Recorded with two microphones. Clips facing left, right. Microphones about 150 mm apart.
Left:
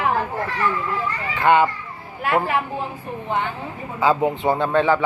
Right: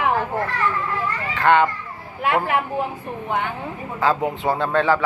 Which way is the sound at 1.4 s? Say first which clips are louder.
Even; 5° left (ahead or behind).